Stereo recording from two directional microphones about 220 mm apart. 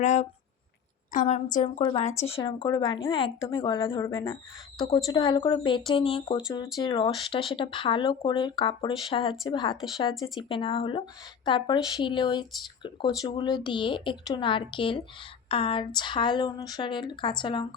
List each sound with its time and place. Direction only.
0.0 s a woman's voice: 30° left (ahead or behind)